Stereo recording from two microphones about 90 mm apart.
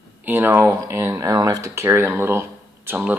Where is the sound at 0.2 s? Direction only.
25° right (ahead or behind).